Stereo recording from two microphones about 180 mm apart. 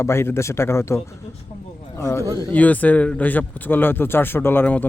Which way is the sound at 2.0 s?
15° left (ahead or behind).